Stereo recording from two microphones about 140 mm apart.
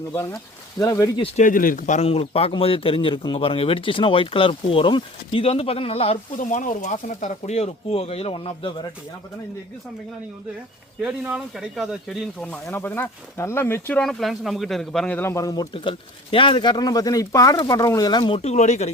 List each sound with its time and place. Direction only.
0.1 s speech: 20° left (ahead or behind)
1.4 s speech: 75° left (ahead or behind)
2.0 s speech: 45° left (ahead or behind)
6.3 s speech: 65° left (ahead or behind); by 8.9 s 40° left (ahead or behind)
11.0 s speech: 10° right (ahead or behind)
12.5 s speech: 15° left (ahead or behind)
14.0 s speech: centre (ahead or behind); by 15.6 s 25° left (ahead or behind)
15.7 s speech: 40° left (ahead or behind)
18.3 s speech: 50° left (ahead or behind)